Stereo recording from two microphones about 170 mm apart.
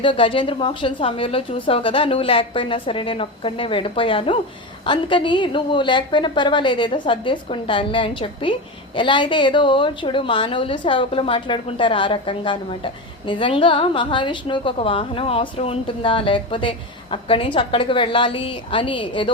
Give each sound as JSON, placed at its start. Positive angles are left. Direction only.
{"t": 0.0, "sound": "a woman's voice", "side_deg": 30}